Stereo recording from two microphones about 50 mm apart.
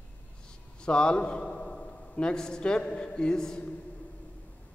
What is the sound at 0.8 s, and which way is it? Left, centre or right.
A man's voice, centre.